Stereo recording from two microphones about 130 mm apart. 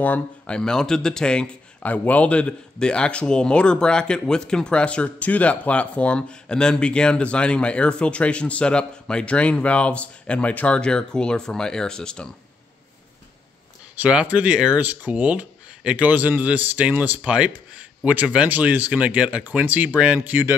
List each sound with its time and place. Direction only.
0.0 s speech: 10° left (ahead or behind)
13.9 s speech: 10° right (ahead or behind)